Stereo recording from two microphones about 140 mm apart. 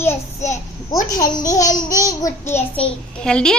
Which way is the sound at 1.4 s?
25° left (ahead or behind).